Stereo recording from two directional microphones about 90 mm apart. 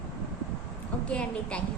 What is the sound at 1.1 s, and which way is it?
Speech, 10° left (ahead or behind).